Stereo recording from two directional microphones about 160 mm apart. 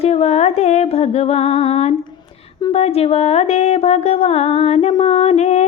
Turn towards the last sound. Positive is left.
turn(degrees=45)  # may be behind; listen again after turning